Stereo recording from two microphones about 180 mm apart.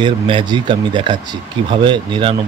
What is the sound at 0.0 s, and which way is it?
Speech, 25° right (ahead or behind).